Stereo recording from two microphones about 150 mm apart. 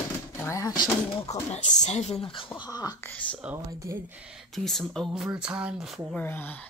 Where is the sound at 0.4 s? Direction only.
20° left (ahead or behind).